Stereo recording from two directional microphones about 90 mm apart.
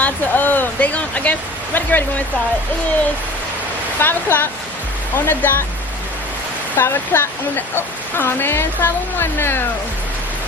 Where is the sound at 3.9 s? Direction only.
25° left (ahead or behind).